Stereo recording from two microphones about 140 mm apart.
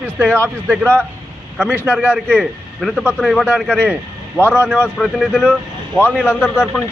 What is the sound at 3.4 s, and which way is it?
Speech, 10° right (ahead or behind).